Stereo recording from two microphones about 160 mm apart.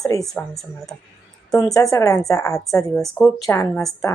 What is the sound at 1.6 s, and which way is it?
A woman's voice, 20° left (ahead or behind).